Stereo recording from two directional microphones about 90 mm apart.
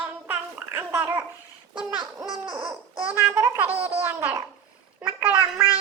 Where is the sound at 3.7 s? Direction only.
90° right.